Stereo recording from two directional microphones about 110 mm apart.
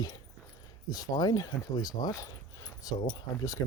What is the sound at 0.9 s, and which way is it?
Speech, 40° left (ahead or behind).